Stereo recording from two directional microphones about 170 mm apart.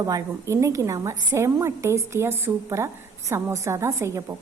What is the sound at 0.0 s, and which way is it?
A woman's voice, 20° right (ahead or behind).